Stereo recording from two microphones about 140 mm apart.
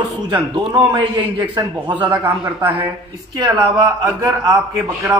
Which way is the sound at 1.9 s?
15° right (ahead or behind).